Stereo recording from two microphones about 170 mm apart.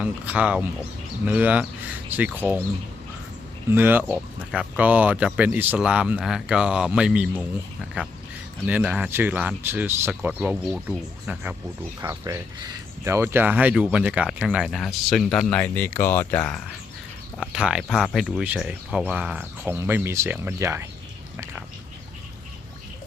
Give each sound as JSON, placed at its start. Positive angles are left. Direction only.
{"t": 0.0, "sound": "speech", "side_deg": -10}
{"t": 3.7, "sound": "speech", "side_deg": -10}
{"t": 17.5, "sound": "speech", "side_deg": -5}
{"t": 21.3, "sound": "a sound", "side_deg": -10}